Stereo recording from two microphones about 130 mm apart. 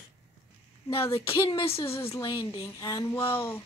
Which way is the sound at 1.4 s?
45° left (ahead or behind).